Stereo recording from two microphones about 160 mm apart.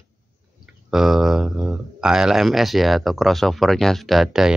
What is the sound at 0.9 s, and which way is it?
Speech, centre (ahead or behind).